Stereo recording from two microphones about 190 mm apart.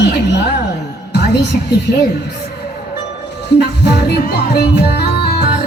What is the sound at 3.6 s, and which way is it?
Music, 60° left (ahead or behind).